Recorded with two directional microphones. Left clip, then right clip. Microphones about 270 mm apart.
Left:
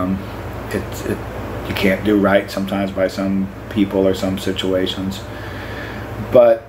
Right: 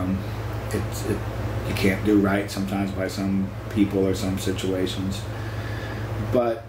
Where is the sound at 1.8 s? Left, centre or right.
Centre.